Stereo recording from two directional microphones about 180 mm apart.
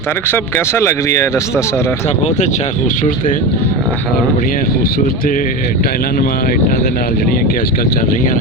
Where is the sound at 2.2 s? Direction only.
35° left (ahead or behind).